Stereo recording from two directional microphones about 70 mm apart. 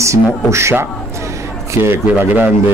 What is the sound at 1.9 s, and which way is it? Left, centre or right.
Speech, right.